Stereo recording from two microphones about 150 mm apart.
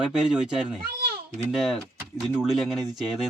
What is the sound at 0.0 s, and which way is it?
Speech, 5° right (ahead or behind).